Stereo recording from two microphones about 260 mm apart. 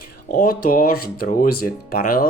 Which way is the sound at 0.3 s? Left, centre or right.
Left.